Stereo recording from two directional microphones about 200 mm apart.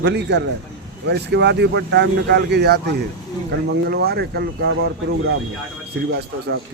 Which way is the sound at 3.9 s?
55° right (ahead or behind).